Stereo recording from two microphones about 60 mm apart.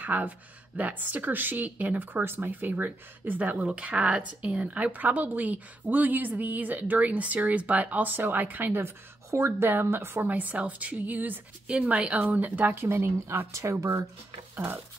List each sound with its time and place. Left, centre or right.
0.0 s speech: right
2.2 s speech: right
2.7 s speech: right
8.8 s speech: right
10.2 s speech: right
12.7 s speech: right
13.5 s speech: right
14.5 s speech: right